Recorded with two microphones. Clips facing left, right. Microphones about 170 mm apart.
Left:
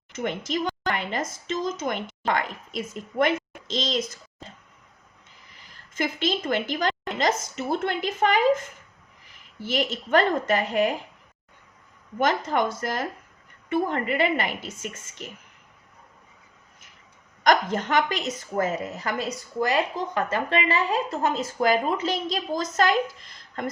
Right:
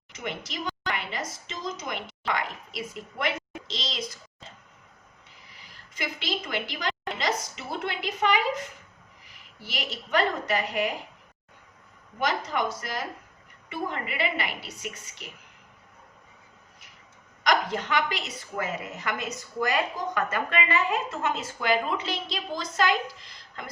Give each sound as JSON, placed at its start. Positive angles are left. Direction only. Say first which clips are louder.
{"t": 0.1, "sound": "a woman's voice", "louder": "left 8 dB", "side_deg": 50}
{"t": 5.5, "sound": "a woman's voice", "louder": "left 7 dB", "side_deg": 45}
{"t": 9.6, "sound": "a woman's voice", "louder": "left 9 dB", "side_deg": 50}
{"t": 12.2, "sound": "a woman's voice", "louder": "left 4 dB", "side_deg": 50}
{"t": 17.4, "sound": "a woman's voice", "louder": "left 4 dB", "side_deg": 45}